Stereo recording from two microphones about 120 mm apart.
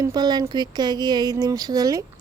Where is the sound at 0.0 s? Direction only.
35° right (ahead or behind).